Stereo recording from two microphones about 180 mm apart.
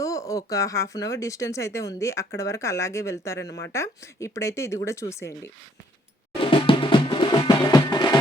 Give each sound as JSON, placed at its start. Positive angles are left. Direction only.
{"t": 0.0, "sound": "speech", "side_deg": 20}
{"t": 6.4, "sound": "percussion", "side_deg": 30}